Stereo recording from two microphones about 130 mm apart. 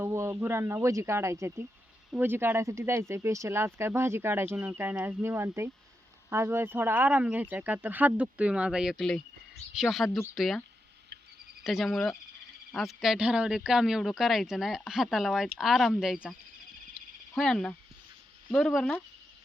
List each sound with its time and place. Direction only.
0.0 s speech: 20° right (ahead or behind); by 10.6 s centre (ahead or behind)
11.6 s speech: centre (ahead or behind)
17.3 s speech: 5° left (ahead or behind)